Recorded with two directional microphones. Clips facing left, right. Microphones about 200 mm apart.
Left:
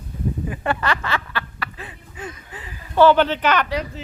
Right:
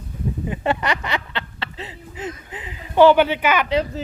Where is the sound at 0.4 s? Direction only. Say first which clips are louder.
Right 2 dB; 20° right (ahead or behind).